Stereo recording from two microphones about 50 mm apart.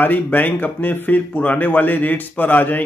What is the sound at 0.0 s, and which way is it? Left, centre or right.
Speech, left.